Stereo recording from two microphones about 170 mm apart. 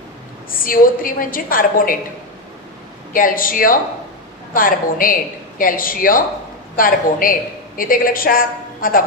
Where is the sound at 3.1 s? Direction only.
55° left (ahead or behind).